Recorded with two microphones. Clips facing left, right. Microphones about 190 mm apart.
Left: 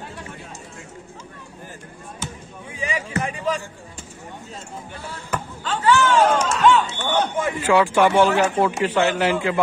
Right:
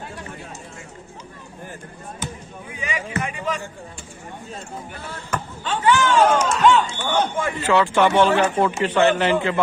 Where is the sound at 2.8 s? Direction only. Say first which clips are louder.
Left 2 dB; 35° left (ahead or behind).